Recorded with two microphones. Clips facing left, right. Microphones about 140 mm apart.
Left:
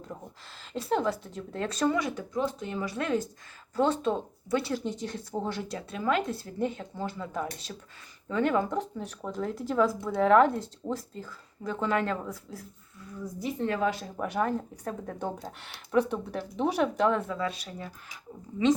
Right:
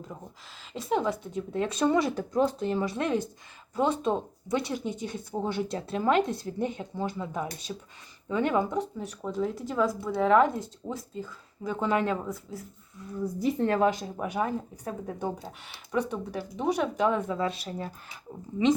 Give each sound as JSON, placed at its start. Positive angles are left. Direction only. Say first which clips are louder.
{"t": 0.6, "sound": "speech", "louder": "left 3 dB", "side_deg": 0}
{"t": 0.9, "sound": "speech", "louder": "right 1 dB", "side_deg": -10}
{"t": 1.9, "sound": "speech", "louder": "right 4 dB", "side_deg": -30}
{"t": 3.8, "sound": "speech", "louder": "even", "side_deg": -10}
{"t": 5.7, "sound": "speech", "louder": "right 4 dB", "side_deg": -30}
{"t": 8.7, "sound": "speech", "louder": "right 1 dB", "side_deg": -5}
{"t": 13.4, "sound": "a woman's voice", "louder": "right 4 dB", "side_deg": -50}
{"t": 14.0, "sound": "speech", "louder": "even", "side_deg": -10}
{"t": 17.0, "sound": "speech", "louder": "even", "side_deg": -10}
{"t": 17.3, "sound": "speech", "louder": "right 3 dB", "side_deg": -25}